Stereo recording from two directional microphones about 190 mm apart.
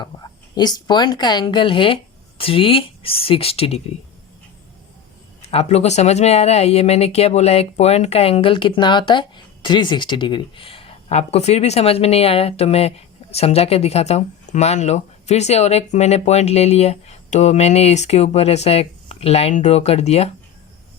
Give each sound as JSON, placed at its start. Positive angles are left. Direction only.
{"t": 0.0, "sound": "speech", "side_deg": 20}
{"t": 5.5, "sound": "speech", "side_deg": 35}